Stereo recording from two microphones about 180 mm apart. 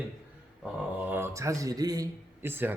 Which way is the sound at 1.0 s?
10° right (ahead or behind).